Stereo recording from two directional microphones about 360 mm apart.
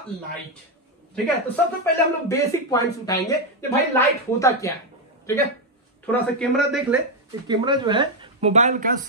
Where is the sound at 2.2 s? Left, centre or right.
Centre.